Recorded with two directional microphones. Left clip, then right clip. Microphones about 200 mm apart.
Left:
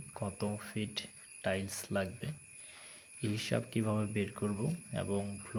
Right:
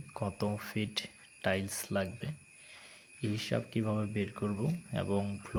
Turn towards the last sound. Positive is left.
turn(degrees=-20)  # may be behind; listen again after turning